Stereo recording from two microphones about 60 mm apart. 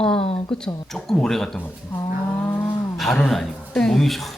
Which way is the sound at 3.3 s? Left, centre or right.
Centre.